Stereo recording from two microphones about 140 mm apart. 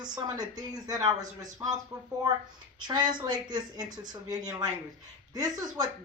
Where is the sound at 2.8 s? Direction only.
30° right (ahead or behind).